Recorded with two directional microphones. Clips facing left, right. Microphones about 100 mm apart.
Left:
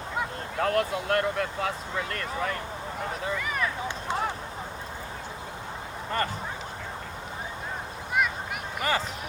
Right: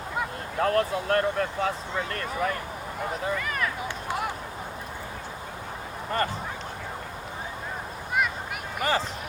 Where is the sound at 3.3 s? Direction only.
5° left (ahead or behind).